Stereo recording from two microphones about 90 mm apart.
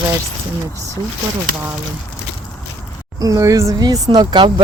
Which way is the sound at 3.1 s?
40° right (ahead or behind).